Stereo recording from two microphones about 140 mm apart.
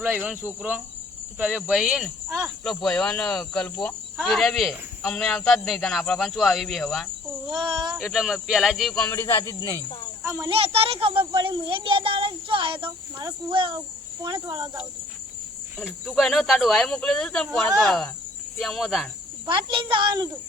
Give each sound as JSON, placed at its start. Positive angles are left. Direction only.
{"t": 0.0, "sound": "cricket", "side_deg": -10}
{"t": 1.4, "sound": "speech", "side_deg": -10}
{"t": 9.0, "sound": "speech", "side_deg": 20}
{"t": 10.2, "sound": "a child's voice", "side_deg": -20}
{"t": 10.5, "sound": "a child's voice", "side_deg": -45}
{"t": 15.8, "sound": "speech", "side_deg": -5}
{"t": 19.5, "sound": "a child's voice", "side_deg": -35}